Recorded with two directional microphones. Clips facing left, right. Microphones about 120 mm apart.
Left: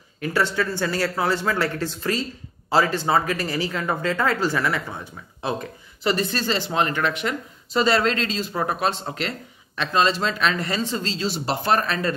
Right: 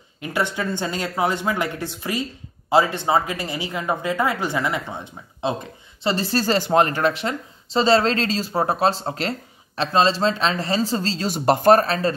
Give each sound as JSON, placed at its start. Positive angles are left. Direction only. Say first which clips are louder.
{"t": 0.2, "sound": "speech", "louder": "left 1 dB", "side_deg": -15}